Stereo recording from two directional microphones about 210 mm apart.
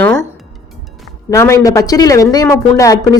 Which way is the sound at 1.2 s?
15° left (ahead or behind).